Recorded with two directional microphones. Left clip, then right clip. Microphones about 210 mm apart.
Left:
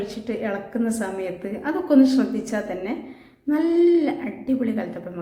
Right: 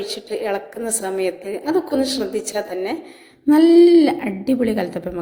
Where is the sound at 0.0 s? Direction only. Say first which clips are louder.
Right 4 dB; 35° right (ahead or behind).